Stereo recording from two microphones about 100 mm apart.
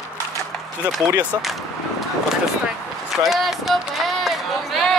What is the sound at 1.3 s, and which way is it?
Speech, 35° right (ahead or behind).